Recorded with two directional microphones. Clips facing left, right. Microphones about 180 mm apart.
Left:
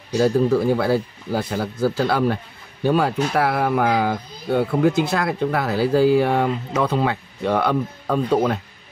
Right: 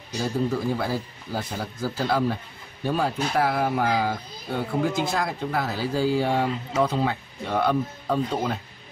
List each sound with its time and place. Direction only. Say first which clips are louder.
0.2 s a man's voice: left 8 dB; 70° left (ahead or behind)